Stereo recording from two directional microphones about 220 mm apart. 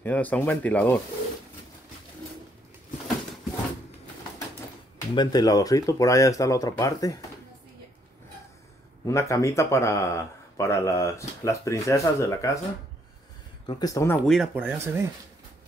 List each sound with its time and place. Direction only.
0.0 s speech: 5° left (ahead or behind)
5.1 s speech: 20° left (ahead or behind)
9.0 s speech: 15° left (ahead or behind)
13.7 s speech: 15° left (ahead or behind)
14.3 s speech: 5° right (ahead or behind)